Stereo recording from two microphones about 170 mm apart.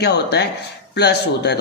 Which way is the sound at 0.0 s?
75° left (ahead or behind).